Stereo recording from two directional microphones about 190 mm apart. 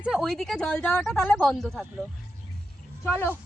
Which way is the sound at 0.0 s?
Centre (ahead or behind).